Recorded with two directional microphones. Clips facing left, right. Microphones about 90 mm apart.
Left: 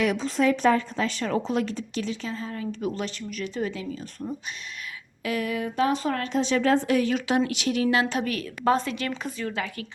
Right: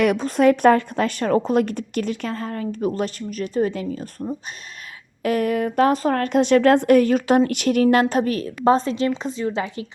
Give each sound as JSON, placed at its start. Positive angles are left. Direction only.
{"t": 0.0, "sound": "a woman's voice", "side_deg": -55}
{"t": 5.2, "sound": "a woman's voice", "side_deg": -50}
{"t": 8.2, "sound": "a woman's voice", "side_deg": -35}